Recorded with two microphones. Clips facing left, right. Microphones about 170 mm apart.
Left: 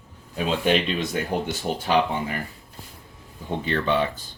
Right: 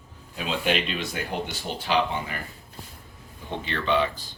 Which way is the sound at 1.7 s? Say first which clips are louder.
Left 5 dB; 45° left (ahead or behind).